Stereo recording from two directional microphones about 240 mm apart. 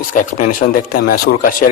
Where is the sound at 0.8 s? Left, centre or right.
Left.